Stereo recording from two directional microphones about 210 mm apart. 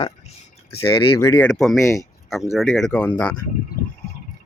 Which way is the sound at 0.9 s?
20° left (ahead or behind).